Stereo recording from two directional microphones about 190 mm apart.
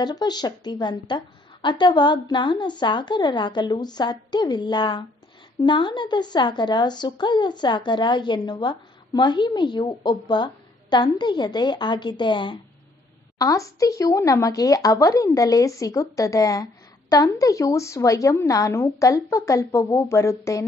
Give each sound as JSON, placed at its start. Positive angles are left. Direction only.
{"t": 0.0, "sound": "a woman's voice", "side_deg": 20}